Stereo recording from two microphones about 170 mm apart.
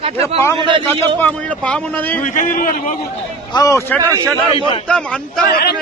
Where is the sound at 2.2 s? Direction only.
50° left (ahead or behind).